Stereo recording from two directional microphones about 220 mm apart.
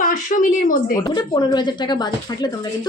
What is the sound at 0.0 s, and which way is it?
Speech, 40° left (ahead or behind).